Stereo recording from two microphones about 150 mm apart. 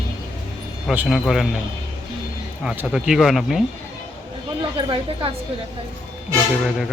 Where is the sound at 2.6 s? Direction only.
5° right (ahead or behind).